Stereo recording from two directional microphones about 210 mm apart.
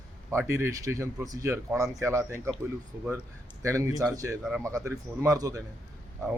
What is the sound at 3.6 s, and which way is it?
A man's voice, 15° right (ahead or behind).